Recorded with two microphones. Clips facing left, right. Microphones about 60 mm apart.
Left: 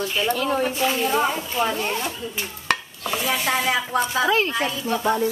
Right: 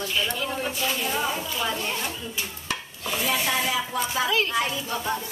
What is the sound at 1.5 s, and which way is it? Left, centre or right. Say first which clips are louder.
Speech: left 5 dB; left.